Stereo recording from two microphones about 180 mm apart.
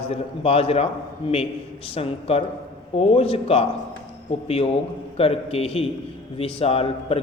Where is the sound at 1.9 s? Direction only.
35° left (ahead or behind).